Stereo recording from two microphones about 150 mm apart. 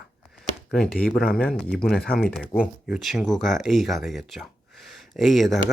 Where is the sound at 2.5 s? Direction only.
15° left (ahead or behind).